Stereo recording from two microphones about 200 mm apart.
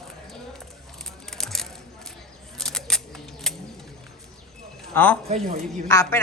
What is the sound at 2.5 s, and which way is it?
Camera, 5° left (ahead or behind).